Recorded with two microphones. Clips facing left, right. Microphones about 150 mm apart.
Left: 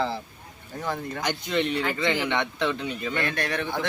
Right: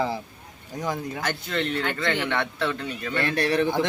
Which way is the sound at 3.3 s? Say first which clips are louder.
Right 6 dB; 35° right (ahead or behind).